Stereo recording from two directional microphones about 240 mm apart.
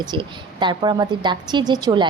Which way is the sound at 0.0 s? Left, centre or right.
Centre.